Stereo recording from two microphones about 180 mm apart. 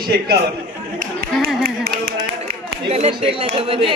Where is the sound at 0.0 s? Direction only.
60° right (ahead or behind).